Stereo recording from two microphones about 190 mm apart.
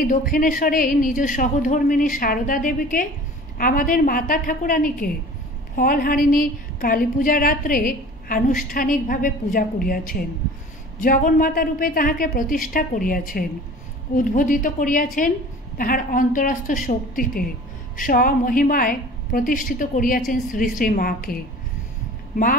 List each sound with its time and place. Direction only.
0.0 s a woman's voice: 45° left (ahead or behind)